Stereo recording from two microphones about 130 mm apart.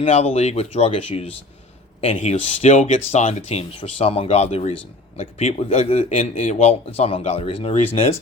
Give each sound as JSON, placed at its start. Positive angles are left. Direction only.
{"t": 0.0, "sound": "speech", "side_deg": 45}